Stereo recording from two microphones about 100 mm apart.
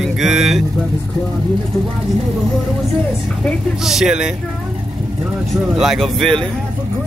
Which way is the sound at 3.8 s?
5° right (ahead or behind).